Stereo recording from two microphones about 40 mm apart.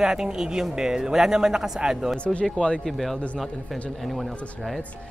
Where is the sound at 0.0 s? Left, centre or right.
Centre.